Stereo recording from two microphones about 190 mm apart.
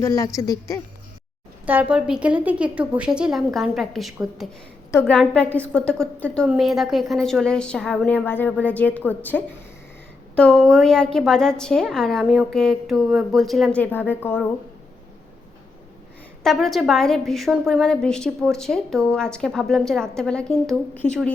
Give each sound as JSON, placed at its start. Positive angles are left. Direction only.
{"t": 0.0, "sound": "speech", "side_deg": 15}
{"t": 1.6, "sound": "a woman's voice", "side_deg": -10}
{"t": 16.4, "sound": "a woman's voice", "side_deg": 0}